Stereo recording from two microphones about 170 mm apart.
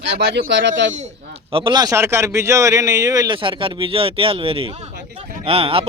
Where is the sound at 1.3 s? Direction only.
30° right (ahead or behind).